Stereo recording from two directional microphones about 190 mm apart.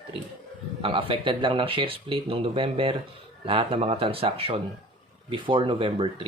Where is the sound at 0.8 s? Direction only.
25° right (ahead or behind).